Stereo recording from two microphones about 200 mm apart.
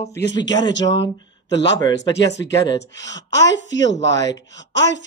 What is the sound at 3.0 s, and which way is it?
Speech, 65° left (ahead or behind).